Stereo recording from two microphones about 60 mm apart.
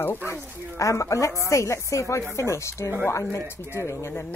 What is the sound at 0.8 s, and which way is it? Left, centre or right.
Speech, left.